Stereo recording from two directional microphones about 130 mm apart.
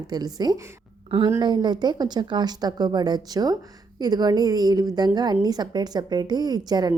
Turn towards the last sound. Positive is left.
turn(degrees=-30)  # may be behind; listen again after turning